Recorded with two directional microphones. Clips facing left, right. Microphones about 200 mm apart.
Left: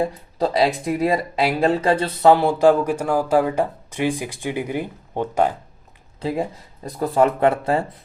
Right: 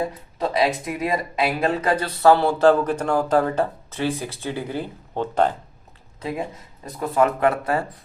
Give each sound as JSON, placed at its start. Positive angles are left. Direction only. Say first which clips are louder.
{"t": 0.0, "sound": "speech", "louder": "left 4 dB", "side_deg": 30}
{"t": 6.1, "sound": "speech", "louder": "left 4 dB", "side_deg": 30}